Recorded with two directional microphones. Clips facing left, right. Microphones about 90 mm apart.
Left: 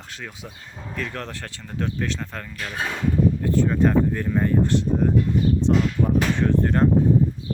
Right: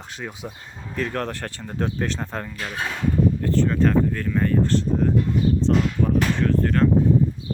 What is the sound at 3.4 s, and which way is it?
Speech, 10° left (ahead or behind).